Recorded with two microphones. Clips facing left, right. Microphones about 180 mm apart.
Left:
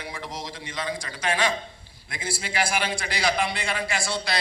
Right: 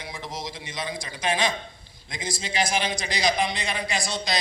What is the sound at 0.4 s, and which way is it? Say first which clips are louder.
A man's voice: left 1 dB; 15° right (ahead or behind).